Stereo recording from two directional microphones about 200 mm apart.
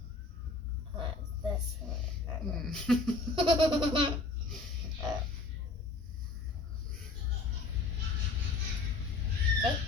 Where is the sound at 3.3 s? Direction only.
20° right (ahead or behind).